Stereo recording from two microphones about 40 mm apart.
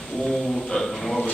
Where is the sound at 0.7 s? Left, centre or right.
Centre.